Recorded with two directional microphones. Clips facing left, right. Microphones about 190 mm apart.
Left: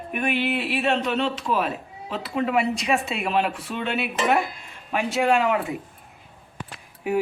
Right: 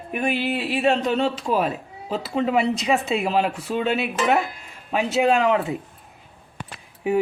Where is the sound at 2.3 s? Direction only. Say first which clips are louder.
Right 2 dB; 25° right (ahead or behind).